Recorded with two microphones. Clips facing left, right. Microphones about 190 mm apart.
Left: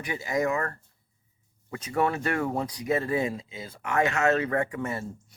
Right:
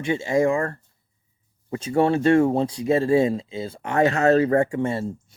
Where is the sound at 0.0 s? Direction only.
25° right (ahead or behind).